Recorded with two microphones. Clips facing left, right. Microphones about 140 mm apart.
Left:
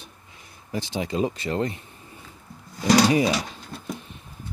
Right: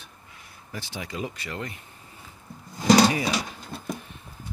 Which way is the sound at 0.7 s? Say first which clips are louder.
Left 8 dB; 20° left (ahead or behind).